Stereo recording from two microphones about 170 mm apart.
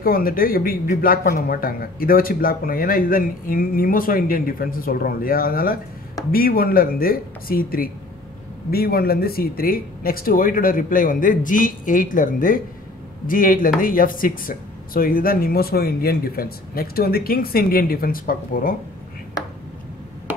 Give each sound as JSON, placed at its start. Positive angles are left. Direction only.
{"t": 0.0, "sound": "speech", "side_deg": 60}